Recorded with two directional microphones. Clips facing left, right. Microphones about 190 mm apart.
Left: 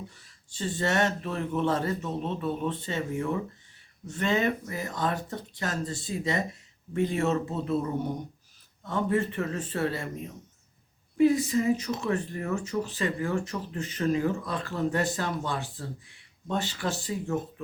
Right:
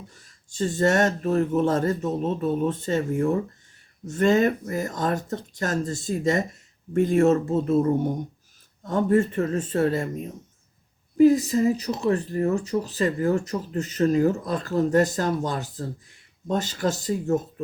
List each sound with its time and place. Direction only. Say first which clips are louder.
0.1 s speech: right 3 dB; 45° right (ahead or behind)
11.2 s speech: right 5 dB; 40° right (ahead or behind)